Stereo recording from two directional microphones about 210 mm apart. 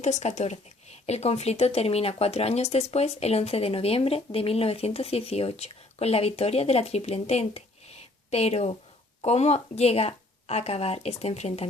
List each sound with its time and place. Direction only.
0.0 s speech: 35° left (ahead or behind)